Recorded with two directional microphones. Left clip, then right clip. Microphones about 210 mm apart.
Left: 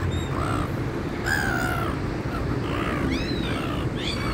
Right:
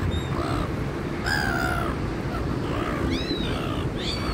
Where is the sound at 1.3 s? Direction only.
15° left (ahead or behind).